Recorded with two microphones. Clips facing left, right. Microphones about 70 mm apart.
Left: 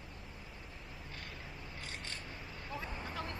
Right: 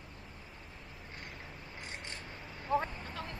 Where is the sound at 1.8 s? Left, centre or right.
Right.